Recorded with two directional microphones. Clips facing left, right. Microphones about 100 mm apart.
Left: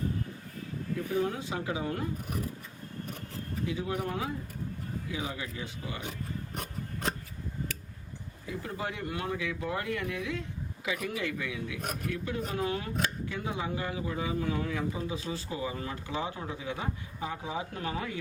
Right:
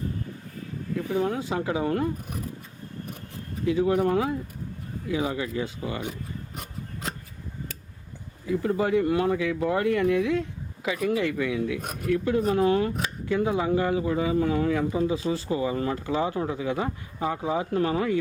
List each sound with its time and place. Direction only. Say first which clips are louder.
1.1 s speech: right 5 dB; 90° right; by 2.0 s 60° right (ahead or behind)
3.7 s speech: right 13 dB; 60° right (ahead or behind)
8.4 s speech: right 12 dB; 45° right (ahead or behind); by 15.1 s 60° right (ahead or behind)
15.1 s speech: right 9 dB; 40° right (ahead or behind)
15.4 s speech: right 10 dB; 60° right (ahead or behind)